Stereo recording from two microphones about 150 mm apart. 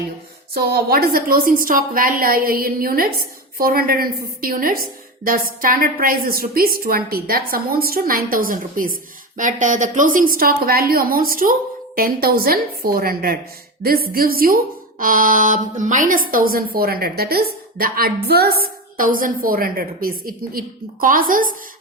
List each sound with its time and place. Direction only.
0.5 s a woman's voice: 90° right; by 8.9 s 70° right (ahead or behind)
9.4 s a woman's voice: 60° right (ahead or behind); by 18.5 s 90° right
18.6 s a woman's voice: 65° right (ahead or behind)